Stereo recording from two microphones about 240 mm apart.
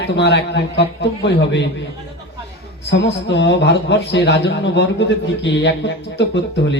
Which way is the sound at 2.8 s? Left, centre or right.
Left.